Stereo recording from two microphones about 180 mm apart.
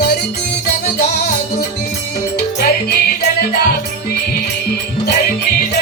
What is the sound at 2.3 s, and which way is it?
Music, 65° left (ahead or behind).